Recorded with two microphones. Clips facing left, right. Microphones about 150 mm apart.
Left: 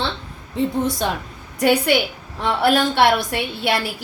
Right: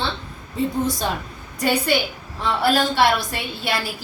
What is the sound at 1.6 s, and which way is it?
A woman's voice, 65° left (ahead or behind).